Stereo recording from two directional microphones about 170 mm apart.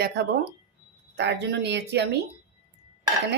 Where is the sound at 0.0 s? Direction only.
85° right.